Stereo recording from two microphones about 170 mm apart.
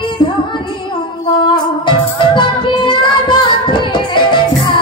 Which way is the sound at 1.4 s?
25° left (ahead or behind).